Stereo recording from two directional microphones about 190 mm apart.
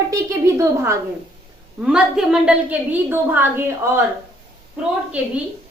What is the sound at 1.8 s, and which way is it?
A woman's voice, 5° right (ahead or behind).